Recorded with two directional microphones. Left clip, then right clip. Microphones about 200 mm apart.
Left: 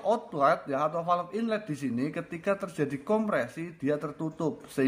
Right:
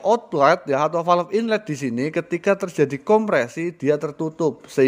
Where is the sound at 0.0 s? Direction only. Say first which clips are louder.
Right 9 dB; 35° right (ahead or behind).